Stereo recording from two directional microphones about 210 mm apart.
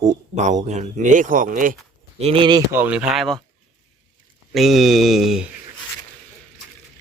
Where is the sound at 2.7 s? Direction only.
5° right (ahead or behind).